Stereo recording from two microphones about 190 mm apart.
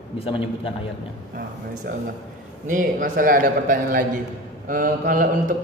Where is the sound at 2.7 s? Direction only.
45° right (ahead or behind).